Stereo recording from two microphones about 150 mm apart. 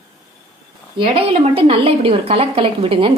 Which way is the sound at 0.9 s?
35° right (ahead or behind).